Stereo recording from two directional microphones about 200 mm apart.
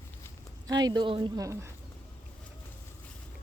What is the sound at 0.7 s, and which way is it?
A woman's voice, 20° right (ahead or behind).